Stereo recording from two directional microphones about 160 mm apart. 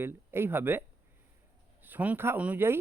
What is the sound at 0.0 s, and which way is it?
Speech, 15° right (ahead or behind).